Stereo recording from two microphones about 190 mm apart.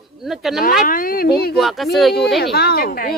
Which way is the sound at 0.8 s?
45° left (ahead or behind).